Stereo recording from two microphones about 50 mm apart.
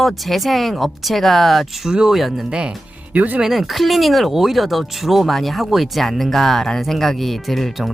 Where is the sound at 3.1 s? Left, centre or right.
Right.